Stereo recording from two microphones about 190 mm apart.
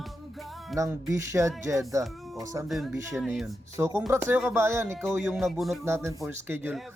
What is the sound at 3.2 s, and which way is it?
Speech, centre (ahead or behind).